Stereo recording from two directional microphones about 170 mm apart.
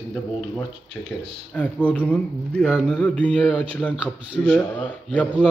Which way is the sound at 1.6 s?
10° left (ahead or behind).